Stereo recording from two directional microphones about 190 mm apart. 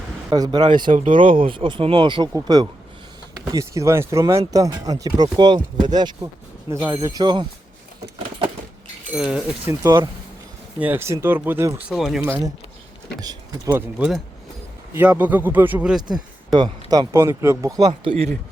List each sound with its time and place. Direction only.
0.3 s speech: 20° right (ahead or behind)
9.1 s speech: 5° right (ahead or behind)
10.8 s speech: 10° right (ahead or behind)
11.9 s speech: centre (ahead or behind)
12.2 s speech: 15° right (ahead or behind)
16.0 s speech: 20° right (ahead or behind)